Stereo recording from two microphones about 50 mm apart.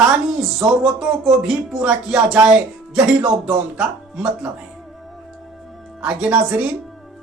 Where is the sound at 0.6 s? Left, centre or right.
Centre.